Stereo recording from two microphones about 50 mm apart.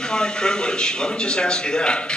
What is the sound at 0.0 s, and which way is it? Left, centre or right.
A man's voice, centre.